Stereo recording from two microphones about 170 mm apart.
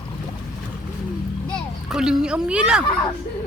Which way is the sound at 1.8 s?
5° right (ahead or behind).